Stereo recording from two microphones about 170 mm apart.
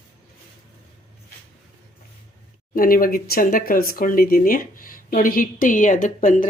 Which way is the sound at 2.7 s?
55° left (ahead or behind).